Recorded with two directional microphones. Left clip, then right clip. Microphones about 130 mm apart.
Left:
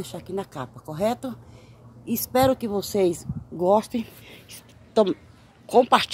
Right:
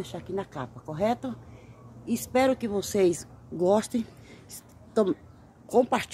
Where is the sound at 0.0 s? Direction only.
40° left (ahead or behind).